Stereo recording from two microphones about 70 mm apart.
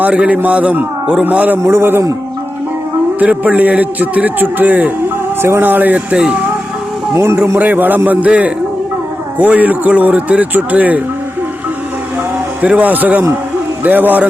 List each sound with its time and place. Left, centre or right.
0.0 s a man's voice: centre
1.5 s a man's voice: right
3.2 s a man's voice: right
7.1 s a man's voice: right
7.6 s a man's voice: right
12.6 s a man's voice: right